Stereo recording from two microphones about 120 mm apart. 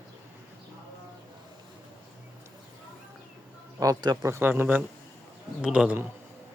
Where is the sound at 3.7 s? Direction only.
30° right (ahead or behind); by 6.0 s 10° right (ahead or behind).